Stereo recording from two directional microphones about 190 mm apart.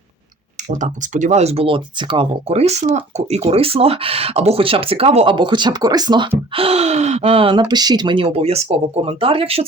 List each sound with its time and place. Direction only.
0.7 s speech: 40° right (ahead or behind)